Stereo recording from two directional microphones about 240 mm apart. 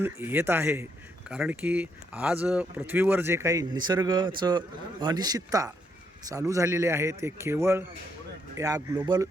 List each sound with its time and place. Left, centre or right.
0.0 s speech: centre